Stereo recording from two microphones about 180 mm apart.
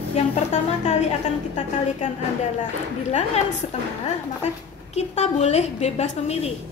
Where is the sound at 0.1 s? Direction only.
40° left (ahead or behind).